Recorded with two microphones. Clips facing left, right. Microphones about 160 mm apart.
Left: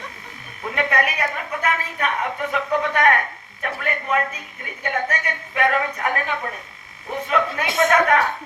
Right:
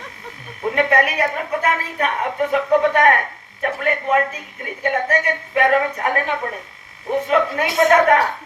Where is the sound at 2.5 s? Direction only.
50° right (ahead or behind).